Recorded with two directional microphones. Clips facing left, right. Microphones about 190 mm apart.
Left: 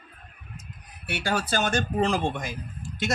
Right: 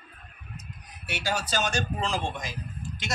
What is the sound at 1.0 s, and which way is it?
A man's voice, 55° left (ahead or behind).